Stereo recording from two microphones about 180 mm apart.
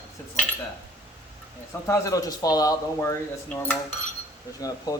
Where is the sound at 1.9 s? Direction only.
20° left (ahead or behind).